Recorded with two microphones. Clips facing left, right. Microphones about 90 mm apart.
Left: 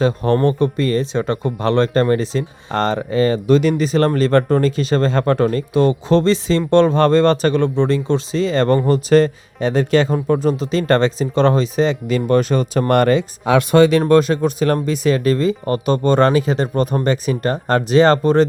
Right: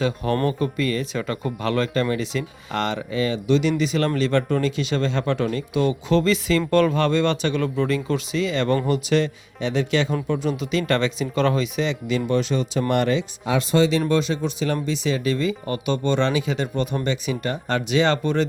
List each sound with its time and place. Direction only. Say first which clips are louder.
0.0 s speech: left 6 dB; 35° left (ahead or behind)